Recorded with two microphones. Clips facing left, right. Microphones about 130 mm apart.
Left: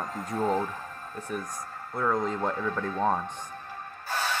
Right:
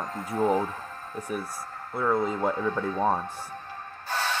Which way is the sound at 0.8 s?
15° left (ahead or behind).